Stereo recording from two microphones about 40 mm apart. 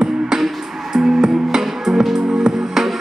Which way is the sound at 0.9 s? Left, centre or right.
Centre.